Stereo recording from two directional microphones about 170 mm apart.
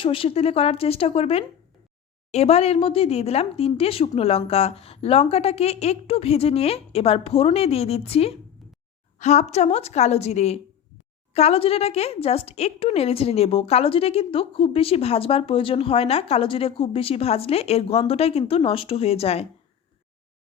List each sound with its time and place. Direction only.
0.0 s a woman's voice: 30° left (ahead or behind)